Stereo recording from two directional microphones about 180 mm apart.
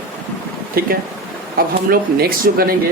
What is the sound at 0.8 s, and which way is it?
Speech, 55° right (ahead or behind).